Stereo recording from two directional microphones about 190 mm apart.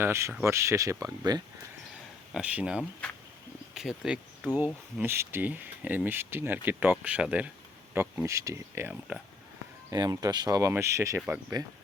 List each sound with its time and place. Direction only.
0.0 s speech: 15° right (ahead or behind)
2.3 s speech: 5° right (ahead or behind)
9.9 s speech: 20° right (ahead or behind)